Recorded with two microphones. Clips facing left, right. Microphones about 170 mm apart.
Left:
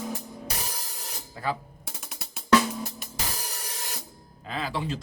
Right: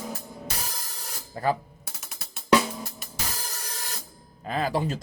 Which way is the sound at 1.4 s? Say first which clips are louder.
Right 5 dB; 40° right (ahead or behind).